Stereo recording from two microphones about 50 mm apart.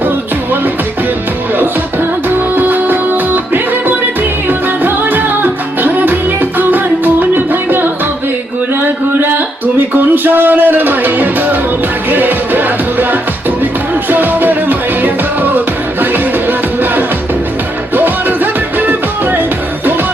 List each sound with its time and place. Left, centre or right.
2.6 s music: right